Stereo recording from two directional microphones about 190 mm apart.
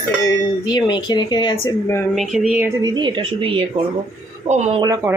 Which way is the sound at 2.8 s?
20° right (ahead or behind).